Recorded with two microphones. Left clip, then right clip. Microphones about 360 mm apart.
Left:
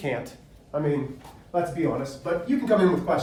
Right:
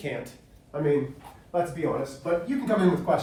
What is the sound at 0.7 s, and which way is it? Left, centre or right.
A man's voice, centre.